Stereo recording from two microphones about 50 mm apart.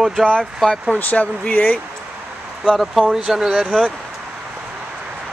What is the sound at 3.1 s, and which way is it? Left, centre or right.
Speech, centre.